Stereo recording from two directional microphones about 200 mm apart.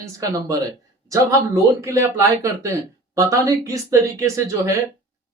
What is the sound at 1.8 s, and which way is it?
Speech, 15° right (ahead or behind).